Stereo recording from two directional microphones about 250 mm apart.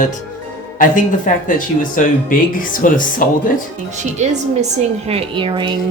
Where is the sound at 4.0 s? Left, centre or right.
Right.